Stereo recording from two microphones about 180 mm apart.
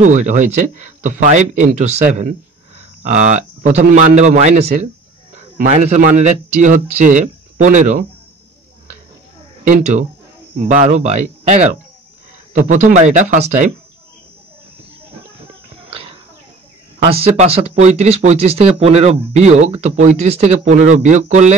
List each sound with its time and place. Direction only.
0.0 s a man's voice: 45° right (ahead or behind)
9.7 s speech: 40° right (ahead or behind)
17.0 s speech: 30° right (ahead or behind)